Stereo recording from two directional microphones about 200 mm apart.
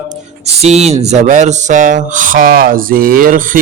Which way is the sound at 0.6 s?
35° right (ahead or behind).